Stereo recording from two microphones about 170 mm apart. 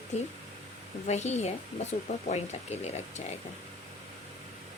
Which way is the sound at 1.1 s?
40° left (ahead or behind).